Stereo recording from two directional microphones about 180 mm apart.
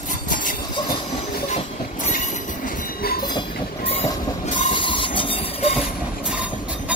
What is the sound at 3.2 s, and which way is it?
Train, 25° left (ahead or behind).